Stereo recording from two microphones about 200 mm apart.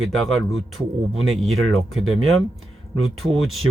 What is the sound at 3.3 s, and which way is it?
Speech, 90° right.